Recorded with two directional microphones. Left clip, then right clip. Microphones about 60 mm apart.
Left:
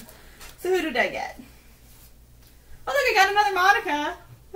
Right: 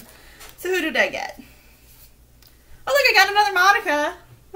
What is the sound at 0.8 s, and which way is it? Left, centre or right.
Speech, right.